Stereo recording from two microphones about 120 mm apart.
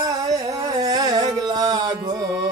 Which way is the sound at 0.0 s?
30° right (ahead or behind).